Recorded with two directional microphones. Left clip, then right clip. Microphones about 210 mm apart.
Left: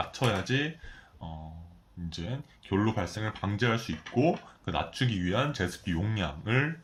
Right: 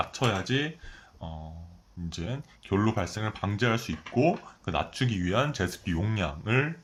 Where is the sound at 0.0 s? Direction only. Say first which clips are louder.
Right 2 dB; 25° right (ahead or behind).